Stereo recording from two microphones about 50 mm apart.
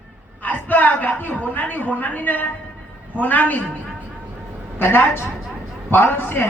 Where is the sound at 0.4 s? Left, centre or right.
Left.